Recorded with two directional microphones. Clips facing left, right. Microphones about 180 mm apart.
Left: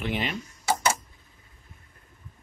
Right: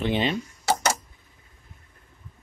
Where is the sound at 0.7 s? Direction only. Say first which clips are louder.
Right 1 dB; 75° right (ahead or behind).